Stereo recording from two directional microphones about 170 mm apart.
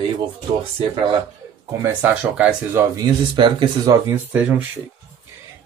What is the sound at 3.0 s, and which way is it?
Speech, 25° right (ahead or behind).